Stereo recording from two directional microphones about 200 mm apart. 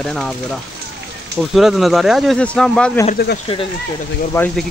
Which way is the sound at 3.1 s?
55° left (ahead or behind).